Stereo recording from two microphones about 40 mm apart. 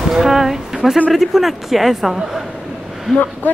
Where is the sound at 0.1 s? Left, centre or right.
Centre.